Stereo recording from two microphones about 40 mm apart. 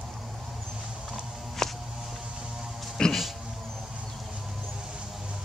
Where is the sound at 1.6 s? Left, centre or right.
Centre.